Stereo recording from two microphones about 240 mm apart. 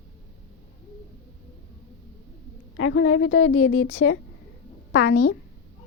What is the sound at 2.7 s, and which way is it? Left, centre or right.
A woman's voice, left.